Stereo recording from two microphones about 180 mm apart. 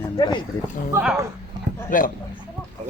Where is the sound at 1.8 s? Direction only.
50° left (ahead or behind).